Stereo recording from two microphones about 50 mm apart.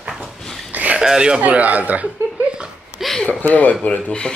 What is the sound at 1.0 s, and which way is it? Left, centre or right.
Speech, centre.